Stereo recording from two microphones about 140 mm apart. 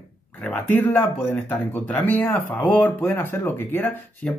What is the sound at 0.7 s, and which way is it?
Speech, 10° left (ahead or behind).